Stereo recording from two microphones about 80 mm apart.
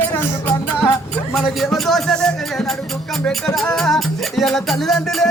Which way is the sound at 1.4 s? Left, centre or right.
Centre.